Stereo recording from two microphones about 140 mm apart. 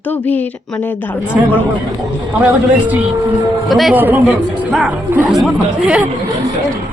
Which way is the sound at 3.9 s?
15° right (ahead or behind).